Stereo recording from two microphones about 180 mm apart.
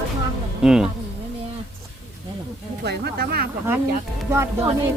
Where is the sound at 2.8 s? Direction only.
65° right (ahead or behind).